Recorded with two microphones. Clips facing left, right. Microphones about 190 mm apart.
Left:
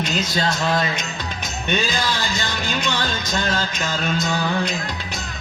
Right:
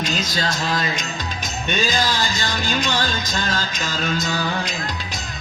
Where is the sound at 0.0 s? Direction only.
60° left (ahead or behind).